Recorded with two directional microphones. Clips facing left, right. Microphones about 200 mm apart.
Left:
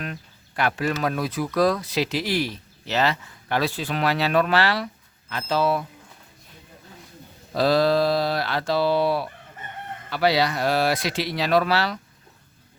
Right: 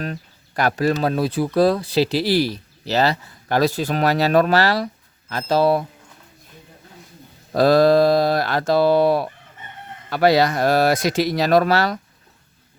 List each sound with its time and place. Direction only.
0.0 s speech: 40° right (ahead or behind)
7.5 s speech: 50° right (ahead or behind)